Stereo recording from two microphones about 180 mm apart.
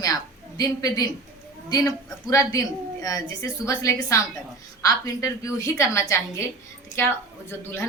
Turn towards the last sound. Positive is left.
turn(degrees=10)  # may be behind; listen again after turning